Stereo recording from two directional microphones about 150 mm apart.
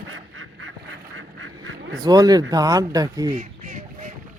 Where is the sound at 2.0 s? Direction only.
25° right (ahead or behind).